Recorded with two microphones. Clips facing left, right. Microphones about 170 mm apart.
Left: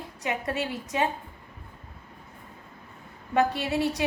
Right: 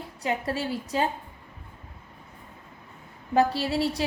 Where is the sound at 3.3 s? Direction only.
30° right (ahead or behind).